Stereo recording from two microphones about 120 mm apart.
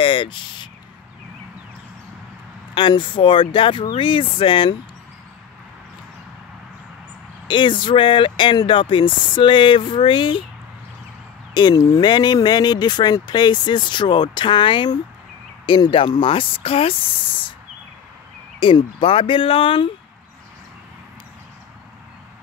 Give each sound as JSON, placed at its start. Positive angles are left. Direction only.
{"t": 0.0, "sound": "a sound", "side_deg": 45}
{"t": 2.7, "sound": "speech", "side_deg": 40}
{"t": 7.4, "sound": "speech", "side_deg": 40}
{"t": 11.5, "sound": "speech", "side_deg": 35}
{"t": 18.6, "sound": "speech", "side_deg": 45}